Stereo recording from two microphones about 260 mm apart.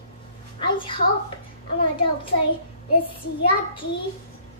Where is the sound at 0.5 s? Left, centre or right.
Centre.